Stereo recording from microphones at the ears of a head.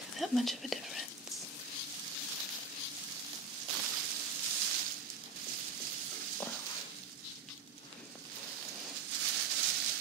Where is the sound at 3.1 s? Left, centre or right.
Right.